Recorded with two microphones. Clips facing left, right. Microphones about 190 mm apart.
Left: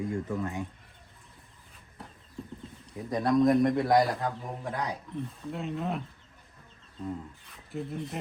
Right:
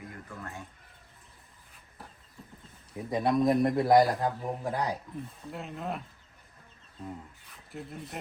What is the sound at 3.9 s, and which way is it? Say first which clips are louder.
Speech: right 4 dB; centre (ahead or behind).